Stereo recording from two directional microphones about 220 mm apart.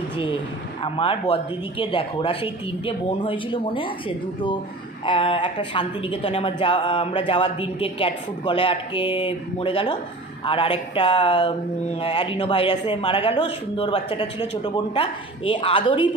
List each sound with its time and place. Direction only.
0.8 s speech: 25° left (ahead or behind)
5.0 s speech: 20° left (ahead or behind)